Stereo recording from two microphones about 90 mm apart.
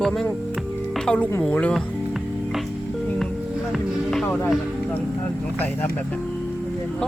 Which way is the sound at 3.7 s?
5° left (ahead or behind).